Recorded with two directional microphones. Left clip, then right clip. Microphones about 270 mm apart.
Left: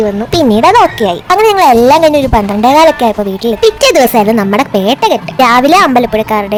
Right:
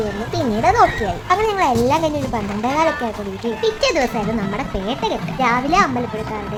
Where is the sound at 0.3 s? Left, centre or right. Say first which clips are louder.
Left 9 dB; left.